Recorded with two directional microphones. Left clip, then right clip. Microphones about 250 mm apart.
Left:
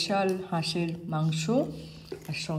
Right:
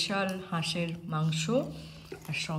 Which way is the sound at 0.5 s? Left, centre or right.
Centre.